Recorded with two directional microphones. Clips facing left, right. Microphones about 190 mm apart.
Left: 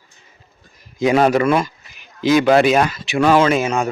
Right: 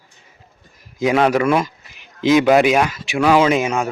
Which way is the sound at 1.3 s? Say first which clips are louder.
Left 1 dB; 10° right (ahead or behind).